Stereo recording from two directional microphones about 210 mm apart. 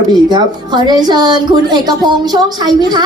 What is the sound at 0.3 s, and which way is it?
A woman's voice, 20° right (ahead or behind).